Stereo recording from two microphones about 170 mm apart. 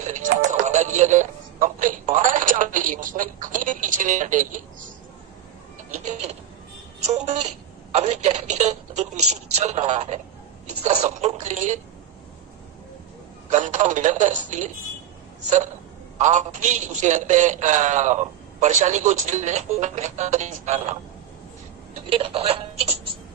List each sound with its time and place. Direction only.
0.0 s chopping: 45° right (ahead or behind)
0.7 s speech: 45° right (ahead or behind)
5.9 s a woman's voice: 40° right (ahead or behind)
13.5 s a man's voice: 45° right (ahead or behind)
22.1 s a woman's voice: 30° right (ahead or behind)